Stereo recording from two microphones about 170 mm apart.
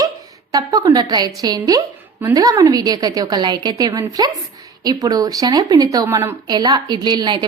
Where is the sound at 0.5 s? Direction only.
20° right (ahead or behind).